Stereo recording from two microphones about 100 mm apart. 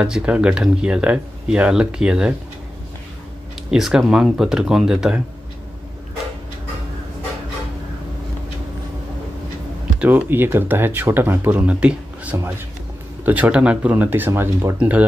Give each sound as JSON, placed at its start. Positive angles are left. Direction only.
{"t": 0.0, "sound": "speech", "side_deg": -10}
{"t": 3.7, "sound": "speech", "side_deg": -5}
{"t": 9.9, "sound": "speech", "side_deg": -15}